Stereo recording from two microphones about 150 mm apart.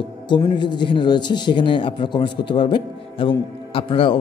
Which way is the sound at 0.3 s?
30° left (ahead or behind).